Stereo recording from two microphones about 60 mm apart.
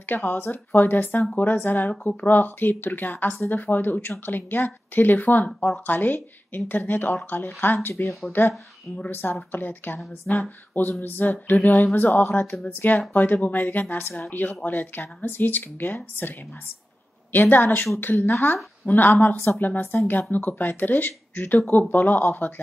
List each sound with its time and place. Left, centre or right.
0.1 s a woman's voice: left
18.0 s a woman's voice: left